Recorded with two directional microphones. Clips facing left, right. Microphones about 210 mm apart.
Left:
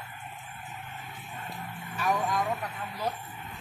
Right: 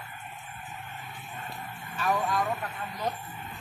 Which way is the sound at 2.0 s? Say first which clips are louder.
Right 1 dB; 15° left (ahead or behind).